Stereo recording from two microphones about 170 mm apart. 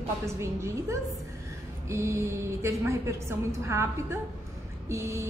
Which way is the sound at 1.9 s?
15° right (ahead or behind).